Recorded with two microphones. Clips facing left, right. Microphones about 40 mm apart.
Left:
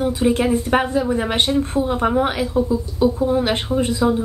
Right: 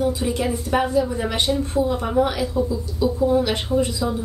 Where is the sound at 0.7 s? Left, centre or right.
Left.